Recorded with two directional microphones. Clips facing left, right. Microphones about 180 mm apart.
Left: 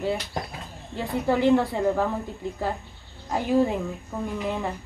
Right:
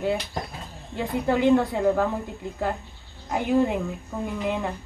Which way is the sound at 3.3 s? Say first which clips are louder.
Even; centre (ahead or behind).